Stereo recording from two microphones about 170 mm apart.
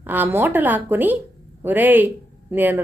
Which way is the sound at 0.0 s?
10° right (ahead or behind).